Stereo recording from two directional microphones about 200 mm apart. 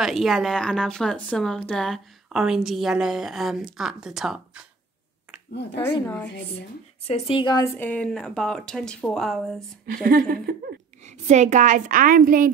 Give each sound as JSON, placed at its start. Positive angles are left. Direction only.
{"t": 0.0, "sound": "speech", "side_deg": 0}
{"t": 5.5, "sound": "speech", "side_deg": 55}
{"t": 7.1, "sound": "speech", "side_deg": 30}
{"t": 10.0, "sound": "laughter", "side_deg": -45}
{"t": 11.1, "sound": "a woman's voice", "side_deg": -35}